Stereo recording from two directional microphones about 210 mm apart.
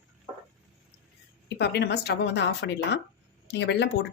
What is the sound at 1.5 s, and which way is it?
Speech, 50° left (ahead or behind).